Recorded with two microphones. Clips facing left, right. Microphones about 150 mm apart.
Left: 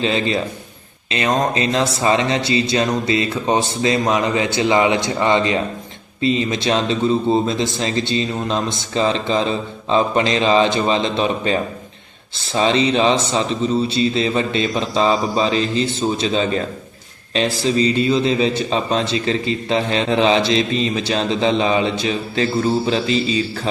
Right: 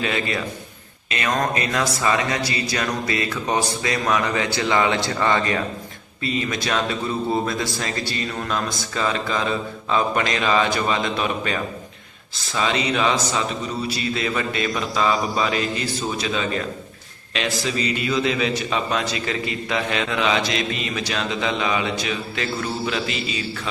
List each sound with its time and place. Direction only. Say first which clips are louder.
0.0 s a man's voice: left 5 dB; 25° left (ahead or behind)